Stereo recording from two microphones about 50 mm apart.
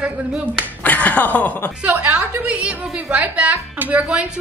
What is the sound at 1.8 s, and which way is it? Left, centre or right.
A woman's voice, right.